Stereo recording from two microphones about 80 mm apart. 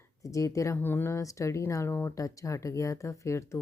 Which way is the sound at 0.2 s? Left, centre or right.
Left.